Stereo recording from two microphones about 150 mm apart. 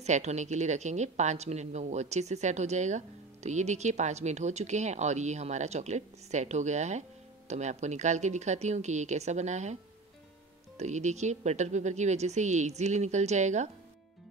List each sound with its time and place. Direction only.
0.0 s speech: 50° right (ahead or behind)
10.8 s speech: 50° right (ahead or behind)